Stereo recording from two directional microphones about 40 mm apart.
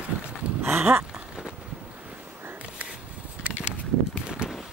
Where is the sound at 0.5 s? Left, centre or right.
Right.